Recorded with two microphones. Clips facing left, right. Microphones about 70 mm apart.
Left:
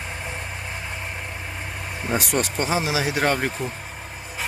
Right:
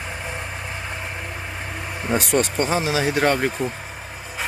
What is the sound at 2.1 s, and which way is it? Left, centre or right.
Speech, centre.